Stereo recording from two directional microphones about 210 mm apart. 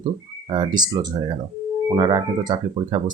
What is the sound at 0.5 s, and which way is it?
Speech, 20° right (ahead or behind).